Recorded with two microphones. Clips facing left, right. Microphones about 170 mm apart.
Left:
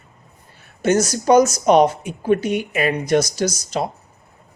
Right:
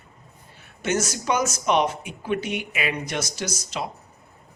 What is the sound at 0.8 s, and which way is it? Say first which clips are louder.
Speech: left 7 dB; 40° left (ahead or behind).